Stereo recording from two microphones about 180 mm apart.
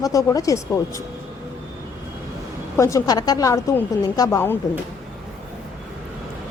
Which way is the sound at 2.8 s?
20° left (ahead or behind).